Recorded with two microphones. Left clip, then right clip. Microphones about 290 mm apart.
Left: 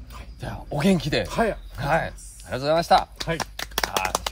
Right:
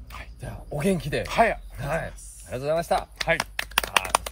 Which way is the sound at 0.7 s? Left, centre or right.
Centre.